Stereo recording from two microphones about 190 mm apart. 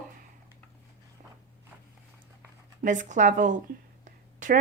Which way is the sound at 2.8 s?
40° right (ahead or behind).